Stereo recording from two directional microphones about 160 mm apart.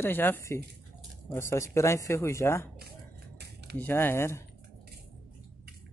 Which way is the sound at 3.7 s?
10° left (ahead or behind).